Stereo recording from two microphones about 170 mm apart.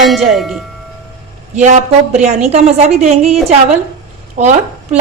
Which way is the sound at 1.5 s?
45° right (ahead or behind).